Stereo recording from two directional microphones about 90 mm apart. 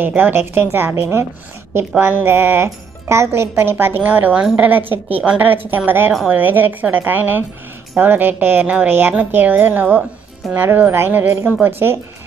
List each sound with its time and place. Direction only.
0.0 s speech: 20° right (ahead or behind)